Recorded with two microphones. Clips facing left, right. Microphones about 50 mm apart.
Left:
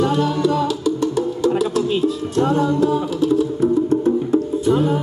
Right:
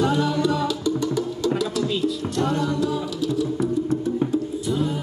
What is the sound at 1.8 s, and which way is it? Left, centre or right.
Music, left.